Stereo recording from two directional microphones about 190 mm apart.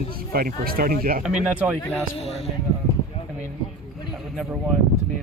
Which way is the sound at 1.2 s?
5° right (ahead or behind).